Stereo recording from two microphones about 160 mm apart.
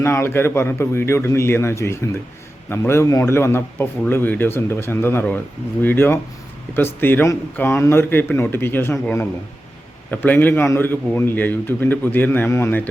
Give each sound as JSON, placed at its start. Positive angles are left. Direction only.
{"t": 0.0, "sound": "a man's voice", "side_deg": 15}